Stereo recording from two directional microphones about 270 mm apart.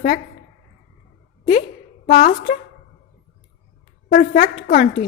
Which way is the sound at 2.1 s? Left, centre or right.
Left.